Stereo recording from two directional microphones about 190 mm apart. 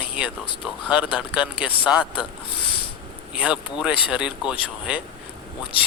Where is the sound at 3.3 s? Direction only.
5° right (ahead or behind).